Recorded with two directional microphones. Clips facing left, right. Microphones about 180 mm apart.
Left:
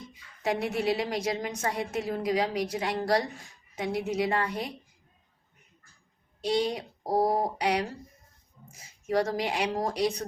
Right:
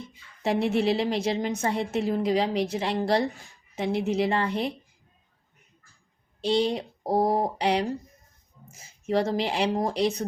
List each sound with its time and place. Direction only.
0.1 s a woman's voice: 30° right (ahead or behind)
6.4 s a woman's voice: 25° right (ahead or behind)